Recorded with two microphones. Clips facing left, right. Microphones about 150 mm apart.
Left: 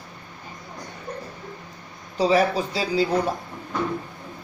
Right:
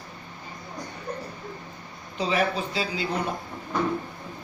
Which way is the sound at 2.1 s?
35° left (ahead or behind).